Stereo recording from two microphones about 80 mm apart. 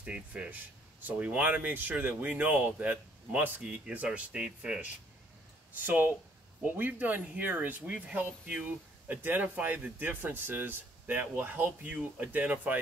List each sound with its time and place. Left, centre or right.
0.0 s speech: centre
5.8 s speech: right